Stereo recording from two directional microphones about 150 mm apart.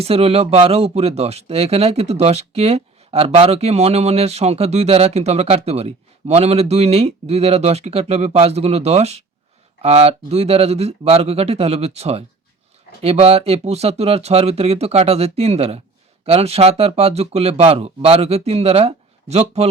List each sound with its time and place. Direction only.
0.0 s speech: 40° right (ahead or behind)